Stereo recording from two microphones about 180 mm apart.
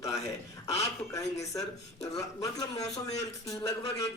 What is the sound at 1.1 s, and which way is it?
A man's voice, 20° left (ahead or behind).